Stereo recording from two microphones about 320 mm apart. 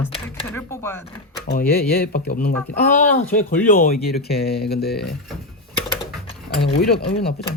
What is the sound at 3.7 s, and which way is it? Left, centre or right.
Speech, left.